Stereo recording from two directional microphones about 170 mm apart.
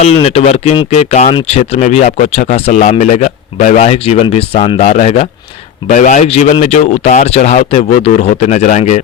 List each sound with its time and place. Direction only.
0.0 s speech: 40° left (ahead or behind)